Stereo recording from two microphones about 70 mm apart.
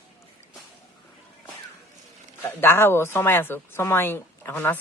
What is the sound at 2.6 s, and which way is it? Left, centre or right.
Speech, left.